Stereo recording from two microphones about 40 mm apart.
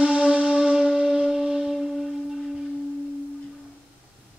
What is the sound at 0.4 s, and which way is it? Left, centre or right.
Shofar, centre.